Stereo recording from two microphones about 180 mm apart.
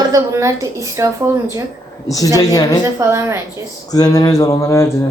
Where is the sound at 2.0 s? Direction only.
20° left (ahead or behind).